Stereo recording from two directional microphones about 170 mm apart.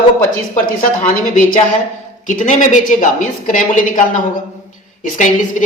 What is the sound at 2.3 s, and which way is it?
A woman's voice, 50° left (ahead or behind).